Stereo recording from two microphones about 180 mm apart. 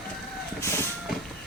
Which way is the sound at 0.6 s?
15° left (ahead or behind).